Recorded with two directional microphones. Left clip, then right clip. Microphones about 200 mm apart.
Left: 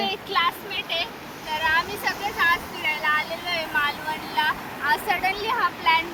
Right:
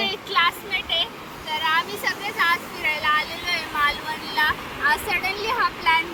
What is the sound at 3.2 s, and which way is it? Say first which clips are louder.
Vehicle: right 1 dB; 10° left (ahead or behind).